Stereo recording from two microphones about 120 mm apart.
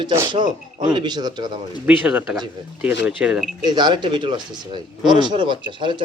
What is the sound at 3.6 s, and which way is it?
Speech, 35° right (ahead or behind).